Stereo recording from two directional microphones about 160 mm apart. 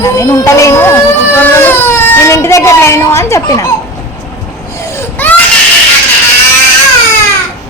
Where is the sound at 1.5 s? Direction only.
15° left (ahead or behind).